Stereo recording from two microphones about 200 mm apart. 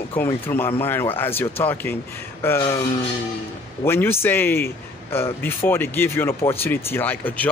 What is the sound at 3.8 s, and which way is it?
A man's voice, 10° left (ahead or behind).